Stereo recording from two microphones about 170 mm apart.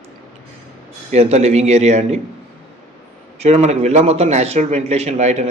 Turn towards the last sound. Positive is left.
turn(degrees=-40)  # may be behind; listen again after turning